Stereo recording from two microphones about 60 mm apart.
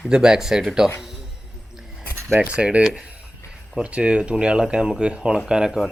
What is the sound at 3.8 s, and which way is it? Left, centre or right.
Speech, centre.